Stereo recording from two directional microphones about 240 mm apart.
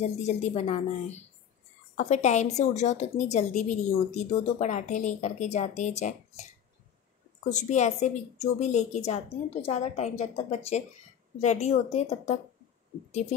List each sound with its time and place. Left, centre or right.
0.0 s a woman's voice: left
7.4 s a woman's voice: left